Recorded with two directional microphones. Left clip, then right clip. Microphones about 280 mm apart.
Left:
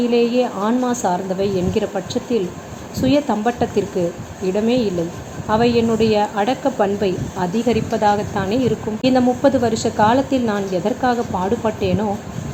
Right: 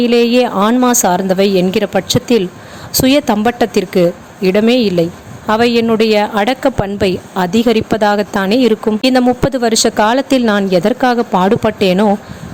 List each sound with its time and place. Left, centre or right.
0.0 s speech: right